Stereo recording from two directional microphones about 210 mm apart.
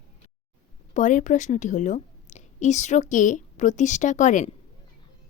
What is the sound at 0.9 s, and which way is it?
A woman's voice, 35° left (ahead or behind).